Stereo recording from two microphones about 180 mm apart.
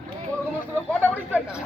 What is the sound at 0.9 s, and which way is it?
Speech, 10° left (ahead or behind).